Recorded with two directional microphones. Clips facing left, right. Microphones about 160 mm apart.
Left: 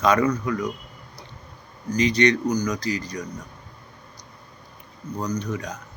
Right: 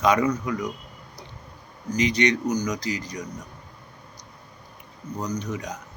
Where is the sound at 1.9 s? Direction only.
15° right (ahead or behind).